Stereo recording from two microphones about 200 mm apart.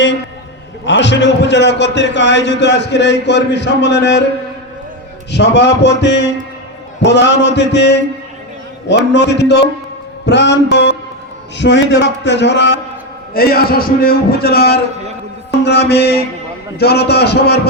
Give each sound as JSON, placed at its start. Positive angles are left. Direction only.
{"t": 0.9, "sound": "a man's voice", "side_deg": 60}
{"t": 5.3, "sound": "a man's voice", "side_deg": 60}
{"t": 13.3, "sound": "a man's voice", "side_deg": 50}